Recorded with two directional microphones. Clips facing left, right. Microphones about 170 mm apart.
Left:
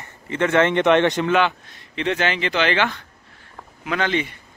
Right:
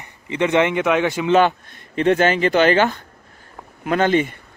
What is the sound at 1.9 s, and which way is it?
Speech, 45° right (ahead or behind).